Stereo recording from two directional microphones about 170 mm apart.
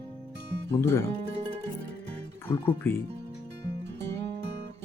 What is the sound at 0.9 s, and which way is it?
Speech, 15° left (ahead or behind).